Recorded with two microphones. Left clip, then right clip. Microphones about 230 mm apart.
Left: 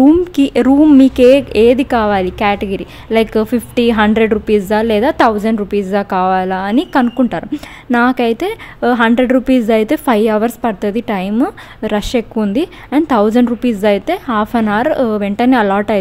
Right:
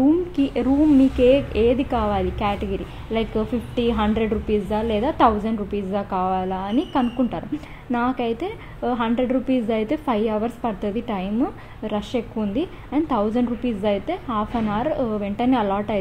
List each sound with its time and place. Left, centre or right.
0.0 s a woman's voice: left